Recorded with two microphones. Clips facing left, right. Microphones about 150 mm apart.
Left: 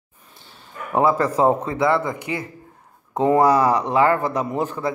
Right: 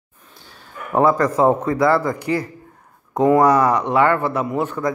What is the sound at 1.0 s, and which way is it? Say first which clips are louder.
A man's voice: right 2 dB; 30° left (ahead or behind).